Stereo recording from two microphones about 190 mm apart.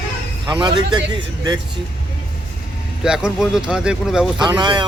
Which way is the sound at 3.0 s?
5° right (ahead or behind).